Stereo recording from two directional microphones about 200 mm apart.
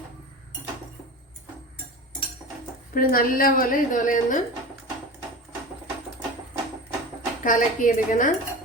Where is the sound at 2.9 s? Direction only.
45° left (ahead or behind).